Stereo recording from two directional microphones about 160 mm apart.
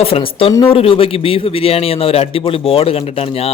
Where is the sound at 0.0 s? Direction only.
35° left (ahead or behind).